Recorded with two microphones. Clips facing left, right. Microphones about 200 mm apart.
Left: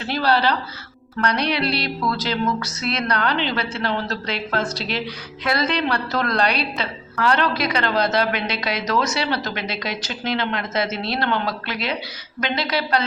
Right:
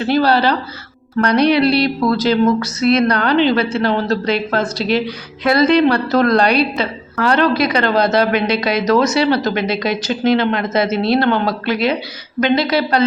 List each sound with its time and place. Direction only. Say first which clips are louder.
0.0 s a woman's voice: right 6 dB; 45° right (ahead or behind)
1.6 s speech: right 10 dB; 10° right (ahead or behind)
2.0 s a woman's voice: right 9 dB; 45° right (ahead or behind)
4.8 s speech: right 10 dB; 5° right (ahead or behind)
5.6 s a woman's voice: right 10 dB; 45° right (ahead or behind)